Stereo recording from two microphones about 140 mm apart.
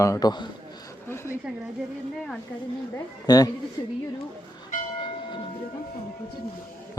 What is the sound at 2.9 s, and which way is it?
Speech, 25° left (ahead or behind).